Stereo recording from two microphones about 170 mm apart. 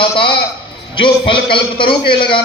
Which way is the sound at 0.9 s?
30° left (ahead or behind).